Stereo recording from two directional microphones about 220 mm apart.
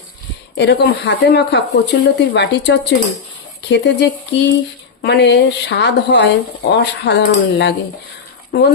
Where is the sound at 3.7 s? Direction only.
50° left (ahead or behind).